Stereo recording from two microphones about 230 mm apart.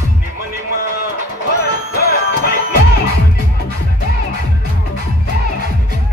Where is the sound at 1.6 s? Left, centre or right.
Left.